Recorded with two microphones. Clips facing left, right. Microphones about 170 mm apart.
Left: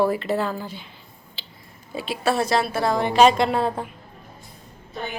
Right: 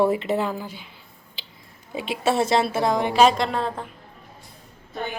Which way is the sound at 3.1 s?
Centre (ahead or behind).